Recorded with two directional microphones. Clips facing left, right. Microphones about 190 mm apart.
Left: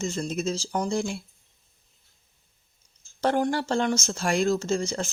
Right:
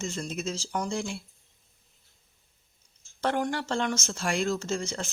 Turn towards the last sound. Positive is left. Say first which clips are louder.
# left 5 dB
turn(degrees=35)  # may be behind; listen again after turning